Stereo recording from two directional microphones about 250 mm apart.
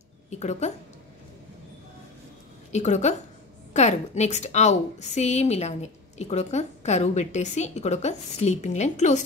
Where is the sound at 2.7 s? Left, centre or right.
Left.